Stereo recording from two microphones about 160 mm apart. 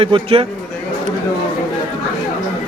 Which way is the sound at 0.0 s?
35° right (ahead or behind).